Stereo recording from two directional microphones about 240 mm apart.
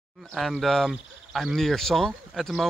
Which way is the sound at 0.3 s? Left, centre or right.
Centre.